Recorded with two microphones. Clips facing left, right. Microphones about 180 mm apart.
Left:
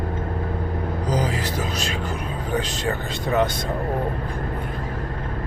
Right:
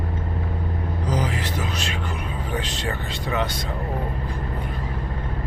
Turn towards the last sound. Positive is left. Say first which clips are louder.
# left 4 dB
turn(degrees=45)  # may be behind; listen again after turning